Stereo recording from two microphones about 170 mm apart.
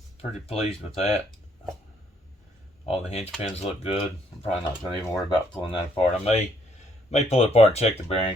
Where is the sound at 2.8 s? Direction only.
35° left (ahead or behind).